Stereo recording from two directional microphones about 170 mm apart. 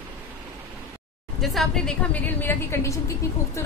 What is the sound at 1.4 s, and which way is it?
A woman's voice, centre (ahead or behind).